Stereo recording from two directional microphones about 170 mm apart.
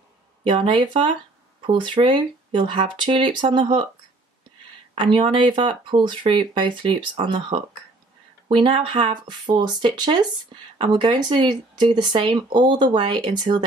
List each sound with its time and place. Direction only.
0.4 s speech: 30° right (ahead or behind)
5.0 s speech: 30° right (ahead or behind)